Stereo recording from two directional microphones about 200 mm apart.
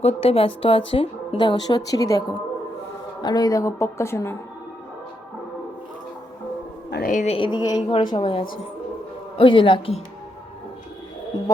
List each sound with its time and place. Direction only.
0.0 s a woman's voice: 30° left (ahead or behind); by 4.4 s 15° left (ahead or behind)
6.9 s speech: 45° left (ahead or behind); by 10.0 s 25° left (ahead or behind)